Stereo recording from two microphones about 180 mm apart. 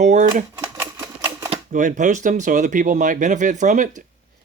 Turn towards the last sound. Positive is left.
turn(degrees=-45)  # may be behind; listen again after turning